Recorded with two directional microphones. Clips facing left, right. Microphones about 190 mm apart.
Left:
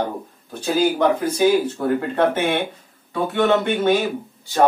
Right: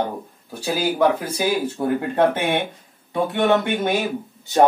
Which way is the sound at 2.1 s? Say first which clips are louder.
Right 2 dB; 15° right (ahead or behind).